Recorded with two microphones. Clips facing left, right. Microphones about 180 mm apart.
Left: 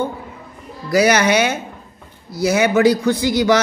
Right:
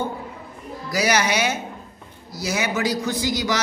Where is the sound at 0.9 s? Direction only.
55° left (ahead or behind).